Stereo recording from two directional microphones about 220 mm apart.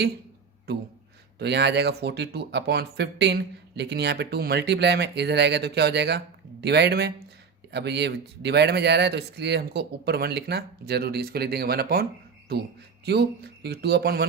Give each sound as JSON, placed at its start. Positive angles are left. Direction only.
{"t": 1.4, "sound": "speech", "side_deg": -50}
{"t": 13.1, "sound": "speech", "side_deg": -50}